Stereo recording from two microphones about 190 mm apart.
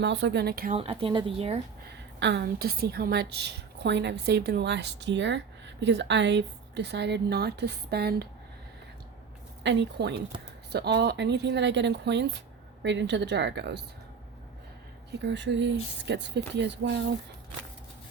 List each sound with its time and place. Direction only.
0.0 s a woman's voice: 65° right (ahead or behind)
0.8 s speech: 30° right (ahead or behind)
2.1 s a woman's voice: 70° right (ahead or behind)
9.6 s a woman's voice: 65° right (ahead or behind)
15.2 s speech: 70° right (ahead or behind)